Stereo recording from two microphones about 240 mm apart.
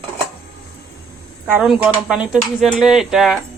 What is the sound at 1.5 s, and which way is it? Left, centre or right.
Speech, centre.